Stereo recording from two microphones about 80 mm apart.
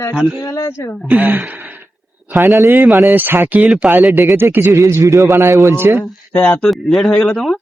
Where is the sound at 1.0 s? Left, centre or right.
Centre.